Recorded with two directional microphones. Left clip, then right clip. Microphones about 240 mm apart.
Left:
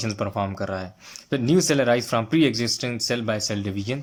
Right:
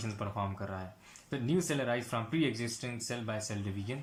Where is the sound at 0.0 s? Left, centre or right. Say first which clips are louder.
Left 11 dB; left.